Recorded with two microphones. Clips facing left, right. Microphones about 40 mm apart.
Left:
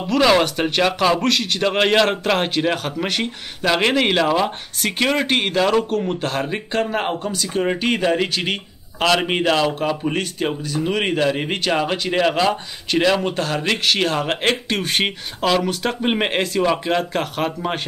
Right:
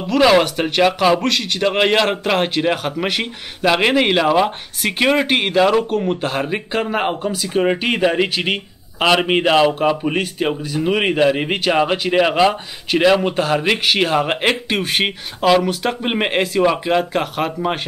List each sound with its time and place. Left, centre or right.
0.0 s speech: centre